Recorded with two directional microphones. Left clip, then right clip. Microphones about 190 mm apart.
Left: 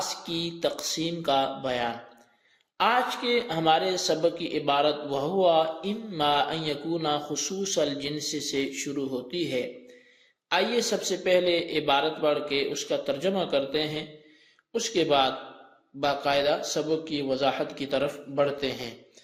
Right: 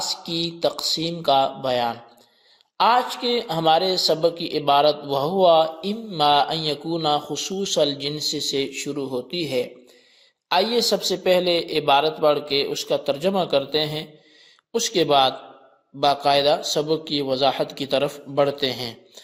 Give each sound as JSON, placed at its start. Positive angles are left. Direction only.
{"t": 0.3, "sound": "a woman's voice", "side_deg": -30}